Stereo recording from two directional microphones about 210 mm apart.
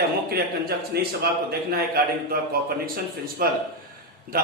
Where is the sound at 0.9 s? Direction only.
50° right (ahead or behind).